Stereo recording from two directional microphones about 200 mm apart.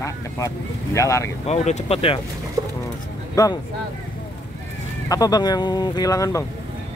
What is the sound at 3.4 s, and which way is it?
Speech, 20° left (ahead or behind).